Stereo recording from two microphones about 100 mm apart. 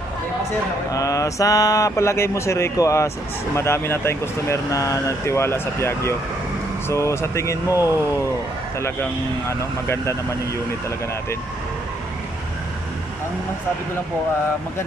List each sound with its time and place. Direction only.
0.9 s speech: 35° left (ahead or behind)